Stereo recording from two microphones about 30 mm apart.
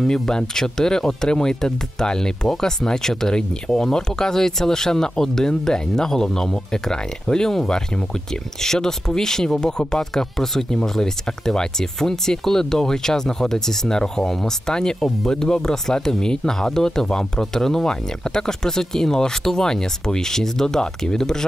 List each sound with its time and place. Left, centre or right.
0.6 s speech: centre
8.5 s speech: centre